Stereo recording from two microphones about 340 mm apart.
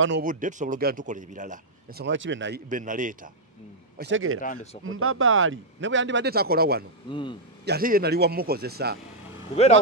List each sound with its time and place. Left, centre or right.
0.0 s a man's voice: right
4.0 s speech: right
7.1 s speech: centre
7.6 s a man's voice: right